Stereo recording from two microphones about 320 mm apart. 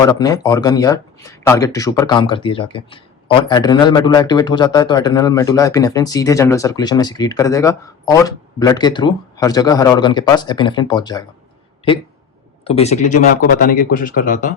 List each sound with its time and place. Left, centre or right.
0.0 s speech: centre
12.6 s speech: centre